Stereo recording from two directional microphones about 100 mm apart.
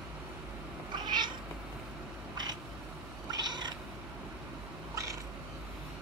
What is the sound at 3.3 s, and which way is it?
Cat, 45° right (ahead or behind).